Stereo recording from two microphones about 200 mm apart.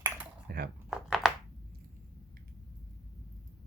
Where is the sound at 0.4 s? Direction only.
50° right (ahead or behind).